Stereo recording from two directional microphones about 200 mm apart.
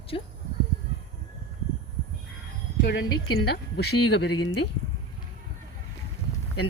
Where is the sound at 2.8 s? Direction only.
60° left (ahead or behind).